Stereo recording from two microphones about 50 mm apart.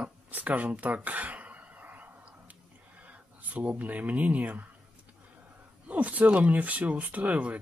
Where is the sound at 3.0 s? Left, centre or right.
Right.